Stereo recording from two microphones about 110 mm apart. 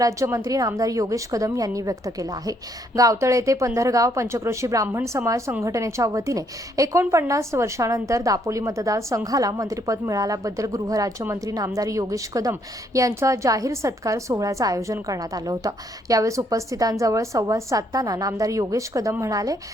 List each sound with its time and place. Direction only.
0.0 s a woman's voice: 30° right (ahead or behind)